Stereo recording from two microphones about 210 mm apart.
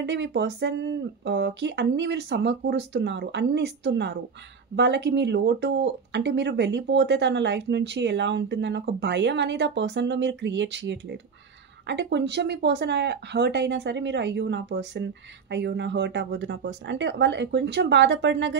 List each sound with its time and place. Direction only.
0.0 s speech: 55° right (ahead or behind)